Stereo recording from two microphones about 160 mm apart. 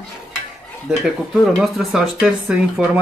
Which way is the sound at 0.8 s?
5° right (ahead or behind).